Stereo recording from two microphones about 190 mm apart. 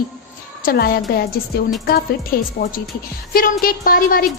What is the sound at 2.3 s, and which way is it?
A woman's voice, 50° left (ahead or behind).